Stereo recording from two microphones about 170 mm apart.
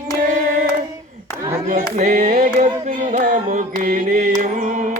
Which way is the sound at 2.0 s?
45° right (ahead or behind).